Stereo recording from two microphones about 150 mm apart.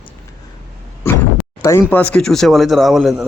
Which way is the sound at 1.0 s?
15° left (ahead or behind).